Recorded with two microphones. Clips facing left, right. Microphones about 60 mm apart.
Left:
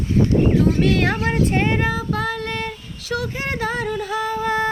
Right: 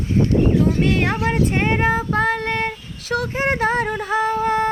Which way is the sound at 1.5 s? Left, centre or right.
Right.